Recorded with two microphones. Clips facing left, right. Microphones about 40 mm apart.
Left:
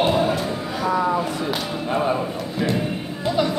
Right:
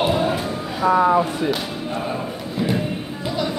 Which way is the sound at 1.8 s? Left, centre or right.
Left.